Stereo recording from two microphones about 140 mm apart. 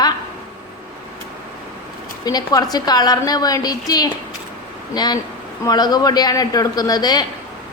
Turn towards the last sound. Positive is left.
turn(degrees=30)  # may be behind; listen again after turning